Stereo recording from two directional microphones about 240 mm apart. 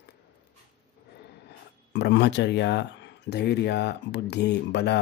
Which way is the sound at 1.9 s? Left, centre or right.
Left.